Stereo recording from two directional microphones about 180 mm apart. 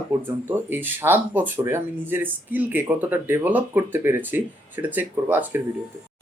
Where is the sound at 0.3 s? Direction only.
10° right (ahead or behind).